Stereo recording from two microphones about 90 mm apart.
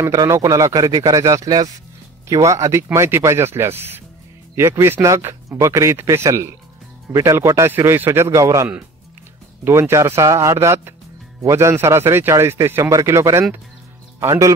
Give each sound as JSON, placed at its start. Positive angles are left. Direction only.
{"t": 0.0, "sound": "speech", "side_deg": -40}
{"t": 9.7, "sound": "speech", "side_deg": -30}